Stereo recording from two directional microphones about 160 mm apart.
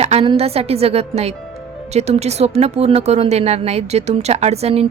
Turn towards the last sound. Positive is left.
turn(degrees=-40)  # may be behind; listen again after turning